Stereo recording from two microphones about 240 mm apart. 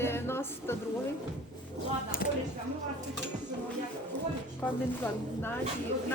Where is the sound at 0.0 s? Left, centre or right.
Centre.